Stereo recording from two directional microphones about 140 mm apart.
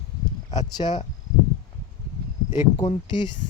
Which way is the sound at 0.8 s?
45° left (ahead or behind).